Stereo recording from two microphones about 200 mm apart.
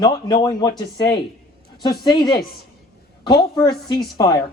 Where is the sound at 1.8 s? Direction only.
20° left (ahead or behind).